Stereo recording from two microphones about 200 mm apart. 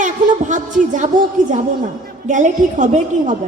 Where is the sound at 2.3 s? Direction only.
40° right (ahead or behind).